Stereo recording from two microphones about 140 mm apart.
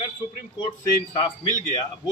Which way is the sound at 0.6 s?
35° left (ahead or behind).